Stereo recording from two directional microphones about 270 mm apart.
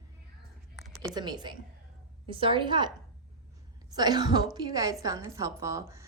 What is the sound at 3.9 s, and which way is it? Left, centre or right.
A woman's voice, centre.